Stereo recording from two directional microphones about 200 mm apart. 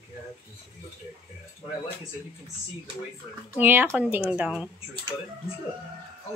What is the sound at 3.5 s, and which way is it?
Speech, 10° right (ahead or behind).